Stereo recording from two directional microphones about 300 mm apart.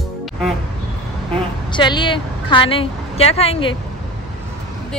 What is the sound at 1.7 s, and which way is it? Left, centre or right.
A woman's voice, centre.